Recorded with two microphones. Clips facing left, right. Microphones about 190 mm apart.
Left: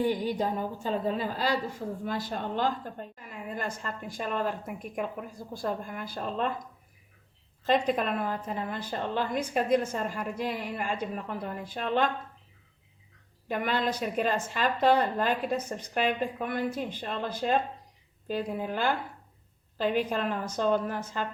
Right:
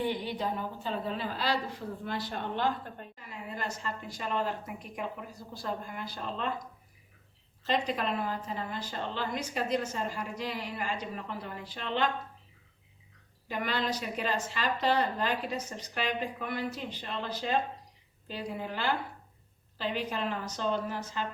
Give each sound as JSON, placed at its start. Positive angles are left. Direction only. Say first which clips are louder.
{"t": 0.0, "sound": "a woman's voice", "louder": "left 5 dB", "side_deg": 45}
{"t": 7.6, "sound": "a woman's voice", "louder": "left 5 dB", "side_deg": 50}
{"t": 13.5, "sound": "a woman's voice", "louder": "left 3 dB", "side_deg": 50}